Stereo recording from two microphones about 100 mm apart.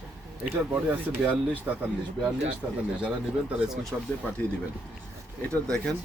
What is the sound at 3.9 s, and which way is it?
Speech, centre (ahead or behind).